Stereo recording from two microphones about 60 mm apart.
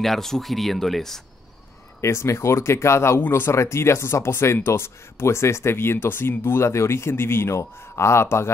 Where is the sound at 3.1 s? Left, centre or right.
Left.